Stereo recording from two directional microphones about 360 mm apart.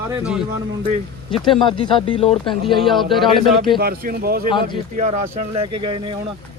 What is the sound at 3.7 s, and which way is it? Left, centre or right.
Speech, right.